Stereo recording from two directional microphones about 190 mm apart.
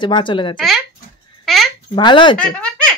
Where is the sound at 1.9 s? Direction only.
25° left (ahead or behind).